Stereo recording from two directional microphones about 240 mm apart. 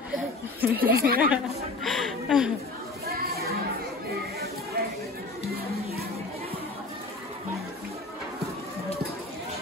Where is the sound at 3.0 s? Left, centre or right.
Right.